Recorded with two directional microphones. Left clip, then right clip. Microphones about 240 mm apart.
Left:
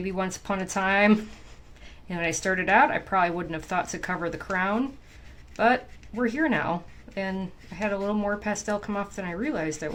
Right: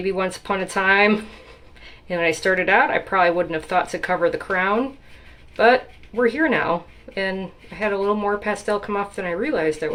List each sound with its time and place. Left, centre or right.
0.0 s speech: left